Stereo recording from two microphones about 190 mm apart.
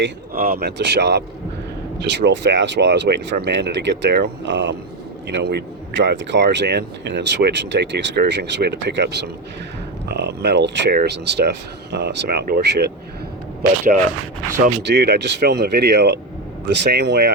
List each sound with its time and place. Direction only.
0.3 s speech: 50° right (ahead or behind)
14.8 s speech: 60° right (ahead or behind)